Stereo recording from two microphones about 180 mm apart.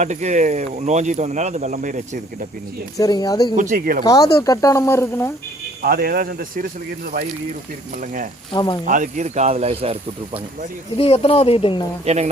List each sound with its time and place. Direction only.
0.0 s speech: 40° right (ahead or behind)
3.0 s speech: 20° left (ahead or behind)
3.5 s speech: 45° right (ahead or behind)
4.0 s speech: 20° left (ahead or behind)
5.8 s speech: 60° right (ahead or behind)
8.5 s speech: 25° left (ahead or behind)
8.9 s speech: 45° right (ahead or behind)
10.9 s speech: 35° left (ahead or behind)
12.0 s speech: 35° right (ahead or behind)